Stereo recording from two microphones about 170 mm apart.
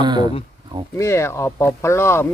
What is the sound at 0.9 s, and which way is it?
Speech, 15° left (ahead or behind).